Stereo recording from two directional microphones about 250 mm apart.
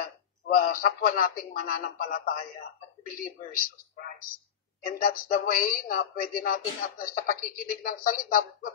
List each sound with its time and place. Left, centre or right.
0.0 s speech: left